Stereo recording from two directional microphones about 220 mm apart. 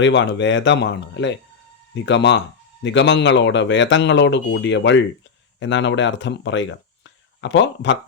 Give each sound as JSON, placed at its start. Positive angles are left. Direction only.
{"t": 0.0, "sound": "a man's voice", "side_deg": 55}